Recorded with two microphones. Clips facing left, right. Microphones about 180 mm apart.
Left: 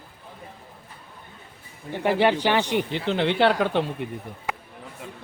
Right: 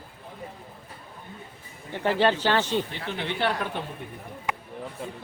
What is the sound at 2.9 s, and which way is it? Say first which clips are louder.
Speech: left 8 dB; 90° left.